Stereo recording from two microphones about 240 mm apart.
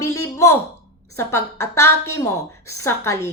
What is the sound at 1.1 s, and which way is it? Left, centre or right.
A woman's voice, centre.